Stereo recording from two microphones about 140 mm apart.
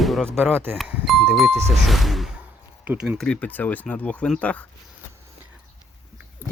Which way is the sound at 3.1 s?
5° left (ahead or behind).